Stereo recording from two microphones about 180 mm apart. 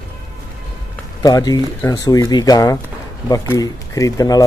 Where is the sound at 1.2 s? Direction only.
20° left (ahead or behind).